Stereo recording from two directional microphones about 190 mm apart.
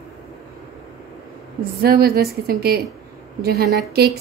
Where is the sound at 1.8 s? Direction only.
55° right (ahead or behind).